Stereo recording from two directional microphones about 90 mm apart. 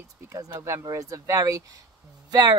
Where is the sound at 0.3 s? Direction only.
35° right (ahead or behind).